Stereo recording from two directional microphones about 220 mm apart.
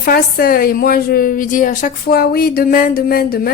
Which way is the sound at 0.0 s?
45° left (ahead or behind).